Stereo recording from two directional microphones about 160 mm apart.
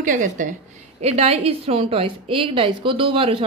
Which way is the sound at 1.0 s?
40° right (ahead or behind).